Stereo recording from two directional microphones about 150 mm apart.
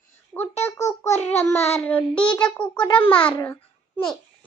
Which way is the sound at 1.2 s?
15° left (ahead or behind).